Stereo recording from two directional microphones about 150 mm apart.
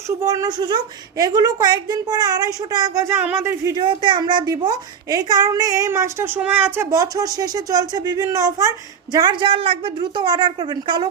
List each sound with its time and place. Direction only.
0.2 s a woman's voice: 20° right (ahead or behind)
3.8 s a woman's voice: 30° right (ahead or behind); by 6.8 s 10° right (ahead or behind)
6.9 s a woman's voice: 25° right (ahead or behind)